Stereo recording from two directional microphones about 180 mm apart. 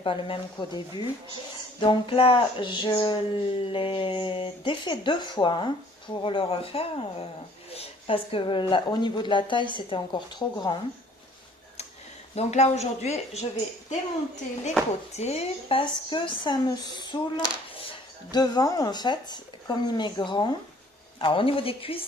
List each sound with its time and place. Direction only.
0.0 s speech: 30° left (ahead or behind)
12.3 s speech: 35° left (ahead or behind)
15.1 s speech: 35° left (ahead or behind)